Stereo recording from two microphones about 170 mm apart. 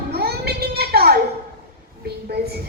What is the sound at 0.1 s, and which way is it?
Music, 70° right (ahead or behind).